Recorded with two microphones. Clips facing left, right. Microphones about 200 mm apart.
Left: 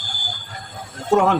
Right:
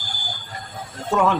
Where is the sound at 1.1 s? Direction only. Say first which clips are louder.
Left 3 dB; 45° left (ahead or behind).